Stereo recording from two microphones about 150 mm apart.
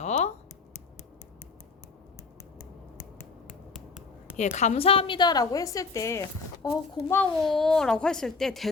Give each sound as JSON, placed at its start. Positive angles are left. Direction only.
{"t": 0.0, "sound": "computer keyboard", "side_deg": 50}
{"t": 4.5, "sound": "a woman's voice", "side_deg": 50}
{"t": 7.4, "sound": "a woman's voice", "side_deg": 0}